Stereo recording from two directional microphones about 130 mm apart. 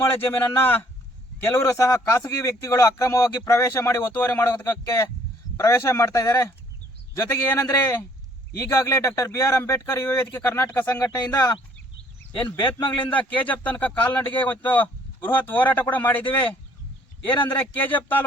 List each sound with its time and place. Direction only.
0.0 s speech: 15° left (ahead or behind)
12.5 s a man's voice: 40° left (ahead or behind)
13.1 s speech: 10° left (ahead or behind)